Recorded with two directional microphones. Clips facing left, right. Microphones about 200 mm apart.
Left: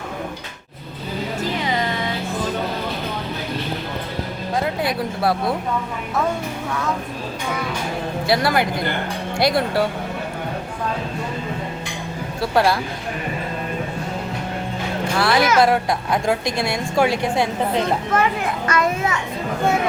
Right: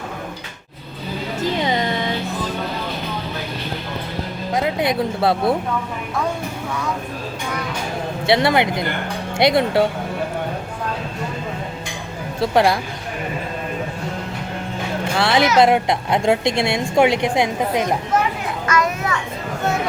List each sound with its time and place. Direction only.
4.5 s speech: 20° right (ahead or behind)
8.3 s a woman's voice: 25° right (ahead or behind)
12.4 s a woman's voice: 20° right (ahead or behind)
15.2 s a woman's voice: 25° right (ahead or behind)
18.7 s children playing: 25° left (ahead or behind)